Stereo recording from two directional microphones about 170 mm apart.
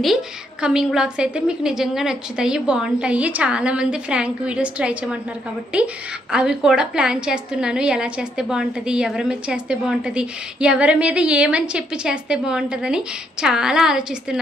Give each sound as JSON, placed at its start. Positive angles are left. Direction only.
{"t": 0.0, "sound": "a woman's voice", "side_deg": 0}